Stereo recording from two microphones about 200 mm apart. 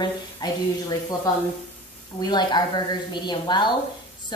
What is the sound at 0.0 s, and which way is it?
Speech, 20° left (ahead or behind).